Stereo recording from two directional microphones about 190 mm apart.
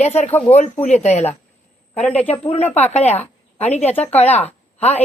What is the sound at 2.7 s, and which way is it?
Speech, 35° left (ahead or behind).